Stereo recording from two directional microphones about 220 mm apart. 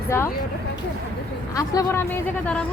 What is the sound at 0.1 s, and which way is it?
Speech, 10° left (ahead or behind).